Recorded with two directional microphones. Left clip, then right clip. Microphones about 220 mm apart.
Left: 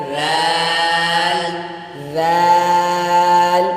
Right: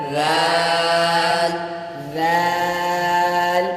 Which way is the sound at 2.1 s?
15° left (ahead or behind).